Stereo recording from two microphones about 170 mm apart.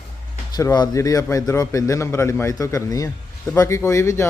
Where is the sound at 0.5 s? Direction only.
25° left (ahead or behind).